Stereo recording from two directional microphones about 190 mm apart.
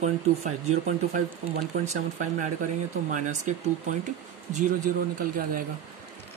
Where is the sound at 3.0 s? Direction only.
40° right (ahead or behind).